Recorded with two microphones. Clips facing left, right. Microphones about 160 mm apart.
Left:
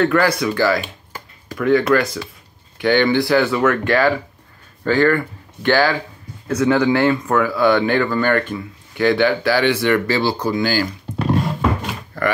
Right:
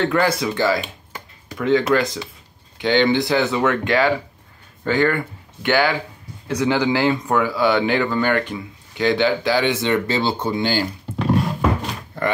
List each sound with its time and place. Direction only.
0.0 s speech: 25° right (ahead or behind)
12.1 s speech: 25° right (ahead or behind)